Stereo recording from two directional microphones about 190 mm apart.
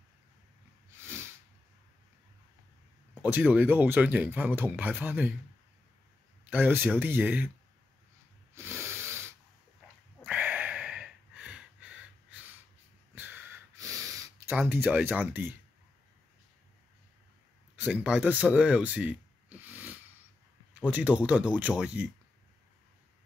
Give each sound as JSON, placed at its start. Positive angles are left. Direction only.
{"t": 1.0, "sound": "a sound", "side_deg": -15}
{"t": 3.3, "sound": "speech", "side_deg": -10}
{"t": 6.5, "sound": "speech", "side_deg": -10}
{"t": 8.5, "sound": "snort", "side_deg": -10}
{"t": 10.2, "sound": "a sound", "side_deg": -5}
{"t": 13.1, "sound": "snort", "side_deg": -10}
{"t": 14.5, "sound": "speech", "side_deg": -5}
{"t": 17.7, "sound": "speech", "side_deg": -5}